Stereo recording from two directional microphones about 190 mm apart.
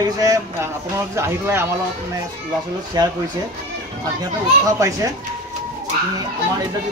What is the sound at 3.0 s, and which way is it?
Speech, 20° right (ahead or behind).